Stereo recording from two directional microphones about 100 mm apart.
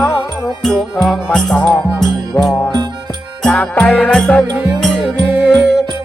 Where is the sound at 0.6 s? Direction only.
5° left (ahead or behind).